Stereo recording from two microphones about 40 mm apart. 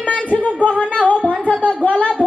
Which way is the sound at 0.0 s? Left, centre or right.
Left.